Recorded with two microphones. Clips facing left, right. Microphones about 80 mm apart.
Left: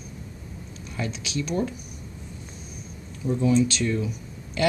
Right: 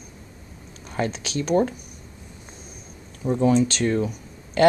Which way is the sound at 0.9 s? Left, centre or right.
Right.